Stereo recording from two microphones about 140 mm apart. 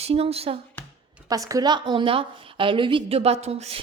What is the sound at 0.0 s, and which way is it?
Speech, 45° right (ahead or behind).